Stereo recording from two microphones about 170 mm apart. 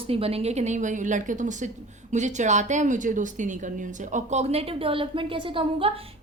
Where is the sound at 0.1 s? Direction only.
35° right (ahead or behind).